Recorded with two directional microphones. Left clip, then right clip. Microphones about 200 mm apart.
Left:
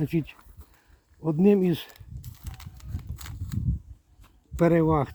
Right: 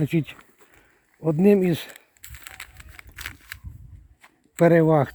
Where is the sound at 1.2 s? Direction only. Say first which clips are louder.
Right 3 dB; 35° right (ahead or behind).